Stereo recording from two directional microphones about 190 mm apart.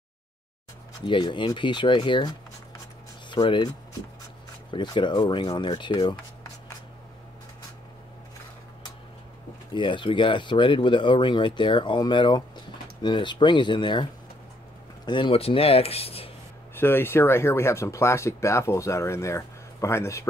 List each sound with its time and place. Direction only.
1.0 s speech: 25° left (ahead or behind)
9.8 s speech: 25° left (ahead or behind)
15.0 s speech: 25° left (ahead or behind)
16.7 s speech: 10° left (ahead or behind)